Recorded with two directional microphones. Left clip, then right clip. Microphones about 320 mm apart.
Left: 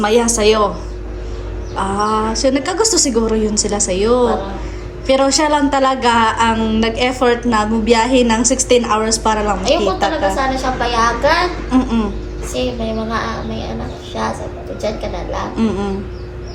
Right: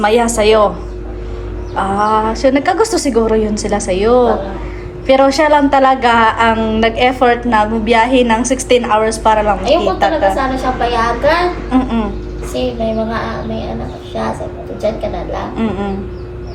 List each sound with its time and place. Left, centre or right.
0.0 s a woman's voice: centre
1.7 s a woman's voice: centre
14.8 s a woman's voice: centre